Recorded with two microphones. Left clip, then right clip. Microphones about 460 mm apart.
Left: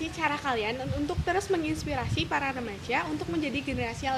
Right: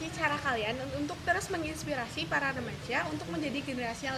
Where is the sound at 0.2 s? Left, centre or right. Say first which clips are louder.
Left 2 dB; left.